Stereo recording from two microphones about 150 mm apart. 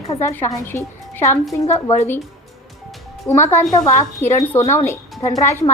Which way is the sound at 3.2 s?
20° left (ahead or behind).